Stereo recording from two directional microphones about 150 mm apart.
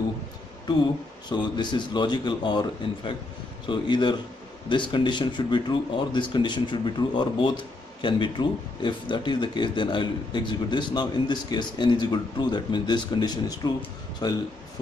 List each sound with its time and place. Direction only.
1.3 s a man's voice: 30° left (ahead or behind)